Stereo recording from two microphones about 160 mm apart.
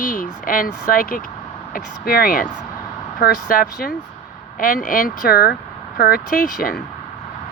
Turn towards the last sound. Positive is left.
turn(degrees=70)  # may be behind; listen again after turning